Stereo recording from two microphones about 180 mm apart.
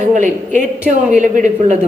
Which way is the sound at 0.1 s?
45° right (ahead or behind).